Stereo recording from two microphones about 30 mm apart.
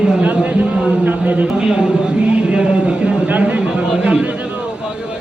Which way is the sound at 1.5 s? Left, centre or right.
Right.